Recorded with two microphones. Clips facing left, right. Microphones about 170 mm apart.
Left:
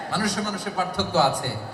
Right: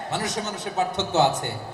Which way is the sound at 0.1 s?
20° right (ahead or behind).